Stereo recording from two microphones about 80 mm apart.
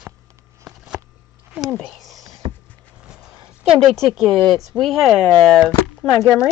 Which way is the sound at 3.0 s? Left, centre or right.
Centre.